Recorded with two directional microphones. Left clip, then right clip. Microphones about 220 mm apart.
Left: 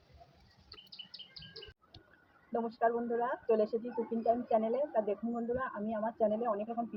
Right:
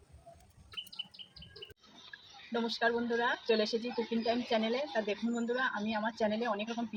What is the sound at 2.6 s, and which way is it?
Speech, 25° right (ahead or behind).